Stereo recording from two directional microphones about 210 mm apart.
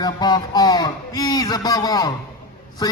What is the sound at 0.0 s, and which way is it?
A man's voice, 20° left (ahead or behind).